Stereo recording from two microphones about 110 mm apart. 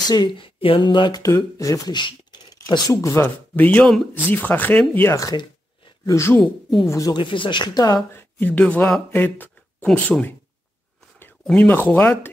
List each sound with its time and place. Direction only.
0.1 s speech: 45° left (ahead or behind)
1.2 s speech: 30° left (ahead or behind)
2.0 s a sound: 40° left (ahead or behind)
2.9 s speech: 25° left (ahead or behind)
5.0 s speech: 30° left (ahead or behind)
5.3 s a sound: 40° left (ahead or behind)
6.1 s speech: 25° left (ahead or behind)
7.2 s speech: 50° left (ahead or behind)
8.1 s speech: 20° left (ahead or behind)
9.1 s a sound: 15° left (ahead or behind)
11.4 s speech: 10° left (ahead or behind)